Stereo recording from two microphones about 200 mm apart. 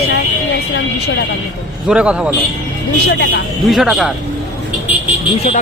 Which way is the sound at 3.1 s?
60° left (ahead or behind).